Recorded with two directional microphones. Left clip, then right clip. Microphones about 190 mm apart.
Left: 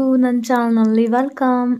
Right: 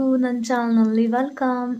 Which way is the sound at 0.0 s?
25° left (ahead or behind).